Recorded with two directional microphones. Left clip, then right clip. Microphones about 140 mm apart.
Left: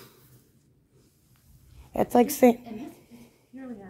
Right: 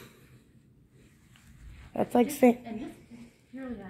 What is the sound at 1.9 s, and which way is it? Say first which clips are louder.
Speech: left 4 dB; 40° left (ahead or behind).